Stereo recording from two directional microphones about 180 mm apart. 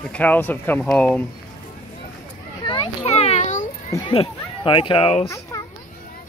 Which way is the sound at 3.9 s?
30° left (ahead or behind).